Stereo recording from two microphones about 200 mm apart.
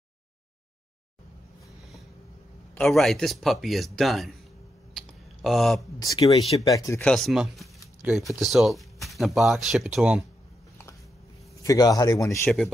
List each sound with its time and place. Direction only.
2.7 s speech: centre (ahead or behind)
4.9 s a sound: centre (ahead or behind)
5.8 s speech: 20° left (ahead or behind)
6.2 s speech: 30° left (ahead or behind)
6.7 s speech: 15° left (ahead or behind)
7.1 s speech: centre (ahead or behind)
11.6 s speech: 15° left (ahead or behind)
12.4 s speech: centre (ahead or behind)